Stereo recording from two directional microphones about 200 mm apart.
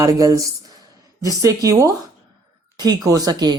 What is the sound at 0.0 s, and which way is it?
A man's voice, 15° right (ahead or behind).